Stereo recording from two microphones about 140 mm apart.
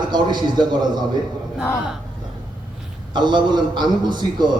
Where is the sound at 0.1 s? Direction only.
30° right (ahead or behind).